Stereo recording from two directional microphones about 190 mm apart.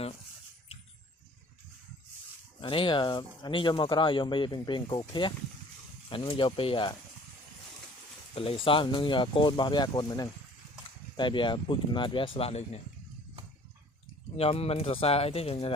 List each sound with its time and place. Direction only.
2.6 s speech: 25° left (ahead or behind)
8.4 s speech: 30° left (ahead or behind)
14.3 s speech: 30° left (ahead or behind)